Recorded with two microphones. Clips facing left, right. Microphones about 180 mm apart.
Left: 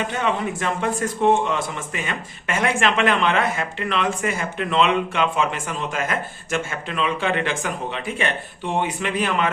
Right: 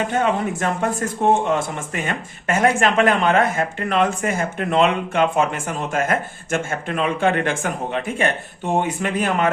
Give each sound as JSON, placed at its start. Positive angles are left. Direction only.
{"t": 0.1, "sound": "speech", "side_deg": -45}